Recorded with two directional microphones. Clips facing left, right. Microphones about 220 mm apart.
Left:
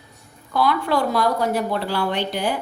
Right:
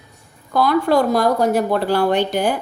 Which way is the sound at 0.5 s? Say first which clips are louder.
Right 5 dB; 45° right (ahead or behind).